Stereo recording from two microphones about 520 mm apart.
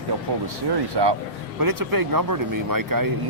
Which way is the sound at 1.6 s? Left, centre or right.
Right.